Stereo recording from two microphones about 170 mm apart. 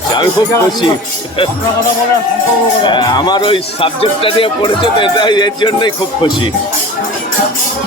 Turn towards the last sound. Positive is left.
turn(degrees=25)  # may be behind; listen again after turning